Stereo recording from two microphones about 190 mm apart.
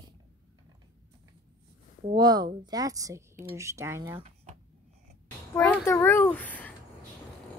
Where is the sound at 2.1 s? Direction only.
20° right (ahead or behind).